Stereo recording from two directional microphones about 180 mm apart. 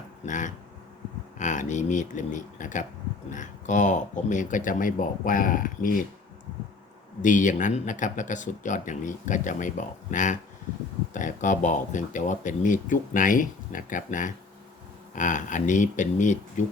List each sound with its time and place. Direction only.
0.3 s speech: 45° left (ahead or behind)
7.2 s speech: 45° left (ahead or behind)